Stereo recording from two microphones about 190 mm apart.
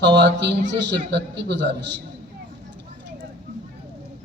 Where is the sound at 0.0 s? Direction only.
65° right (ahead or behind).